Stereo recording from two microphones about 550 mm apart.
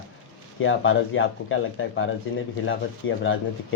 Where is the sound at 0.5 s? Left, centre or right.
Left.